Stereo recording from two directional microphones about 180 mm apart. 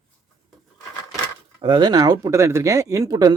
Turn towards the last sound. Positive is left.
turn(degrees=-20)  # may be behind; listen again after turning